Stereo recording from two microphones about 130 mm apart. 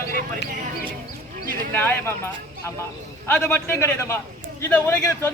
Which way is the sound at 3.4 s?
20° left (ahead or behind).